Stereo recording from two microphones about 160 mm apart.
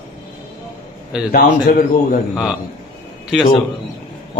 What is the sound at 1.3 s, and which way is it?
Speech, 60° left (ahead or behind).